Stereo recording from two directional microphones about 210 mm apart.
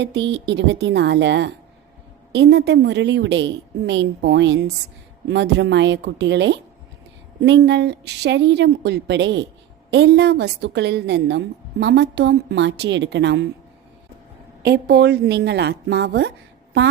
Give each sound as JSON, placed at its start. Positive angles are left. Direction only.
{"t": 0.0, "sound": "a woman's voice", "side_deg": -55}
{"t": 14.6, "sound": "a woman's voice", "side_deg": -50}